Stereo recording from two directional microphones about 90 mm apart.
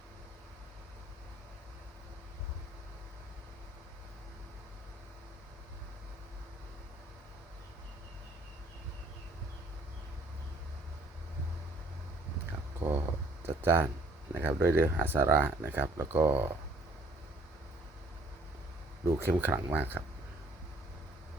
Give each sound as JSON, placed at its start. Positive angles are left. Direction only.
{"t": 12.5, "sound": "a sound", "side_deg": -25}
{"t": 14.3, "sound": "speech", "side_deg": -25}
{"t": 19.0, "sound": "speech", "side_deg": -25}